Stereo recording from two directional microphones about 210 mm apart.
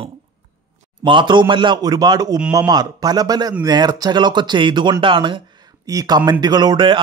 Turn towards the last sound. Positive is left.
turn(degrees=-20)  # may be behind; listen again after turning